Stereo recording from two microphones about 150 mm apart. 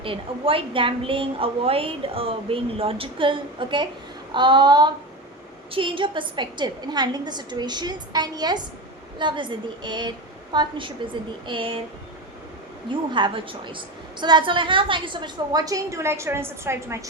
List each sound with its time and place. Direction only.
0.0 s a woman's voice: 35° right (ahead or behind)
12.9 s a woman's voice: 35° right (ahead or behind)